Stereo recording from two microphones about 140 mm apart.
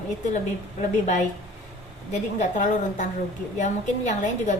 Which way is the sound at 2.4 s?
60° left (ahead or behind).